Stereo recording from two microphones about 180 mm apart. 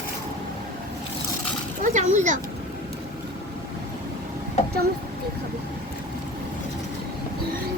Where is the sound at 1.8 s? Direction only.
40° right (ahead or behind).